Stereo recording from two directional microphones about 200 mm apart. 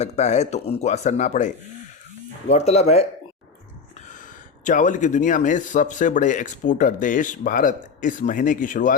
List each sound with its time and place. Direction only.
0.0 s speech: 35° left (ahead or behind)
4.6 s speech: 40° left (ahead or behind)